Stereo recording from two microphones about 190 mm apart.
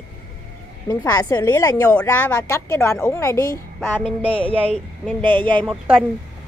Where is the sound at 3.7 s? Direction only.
10° left (ahead or behind).